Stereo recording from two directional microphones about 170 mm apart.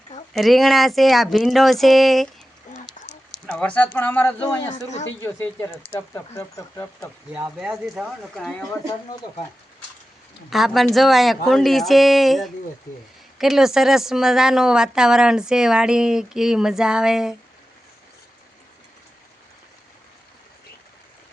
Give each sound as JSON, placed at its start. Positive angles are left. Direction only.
{"t": 0.3, "sound": "a woman's voice", "side_deg": 0}
{"t": 3.4, "sound": "speech", "side_deg": 5}
{"t": 7.6, "sound": "a woman's voice", "side_deg": -5}
{"t": 10.5, "sound": "a woman's voice", "side_deg": 0}